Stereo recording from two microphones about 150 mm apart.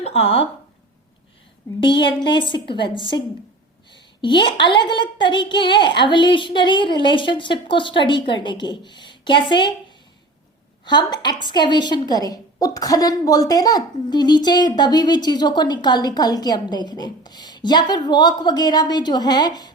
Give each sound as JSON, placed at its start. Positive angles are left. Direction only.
{"t": 0.0, "sound": "speech", "side_deg": 40}
{"t": 1.8, "sound": "a woman's voice", "side_deg": 35}
{"t": 10.8, "sound": "a woman's voice", "side_deg": 30}